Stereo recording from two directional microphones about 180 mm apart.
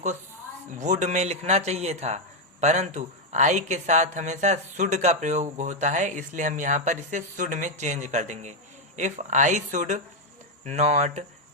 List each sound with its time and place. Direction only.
0.7 s speech: 40° right (ahead or behind)